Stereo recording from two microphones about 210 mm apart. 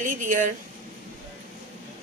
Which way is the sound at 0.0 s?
40° right (ahead or behind).